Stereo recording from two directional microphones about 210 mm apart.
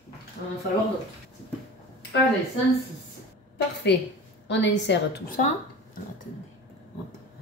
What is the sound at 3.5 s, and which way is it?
A woman's voice, 55° left (ahead or behind).